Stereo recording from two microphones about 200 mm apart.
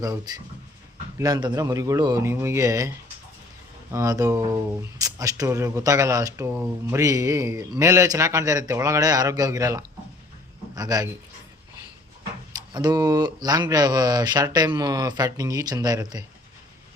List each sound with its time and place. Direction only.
0.0 s speech: 15° right (ahead or behind)
3.9 s speech: 15° right (ahead or behind)
12.7 s speech: 20° right (ahead or behind)